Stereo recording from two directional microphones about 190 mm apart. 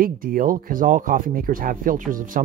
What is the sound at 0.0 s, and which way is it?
Speech, 50° right (ahead or behind).